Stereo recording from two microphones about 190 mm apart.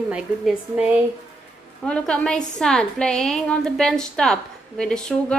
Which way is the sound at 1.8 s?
5° left (ahead or behind).